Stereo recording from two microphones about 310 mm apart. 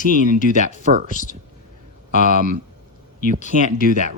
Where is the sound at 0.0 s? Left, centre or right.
Left.